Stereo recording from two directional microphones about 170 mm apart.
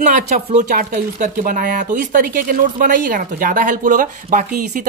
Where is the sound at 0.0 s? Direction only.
45° right (ahead or behind).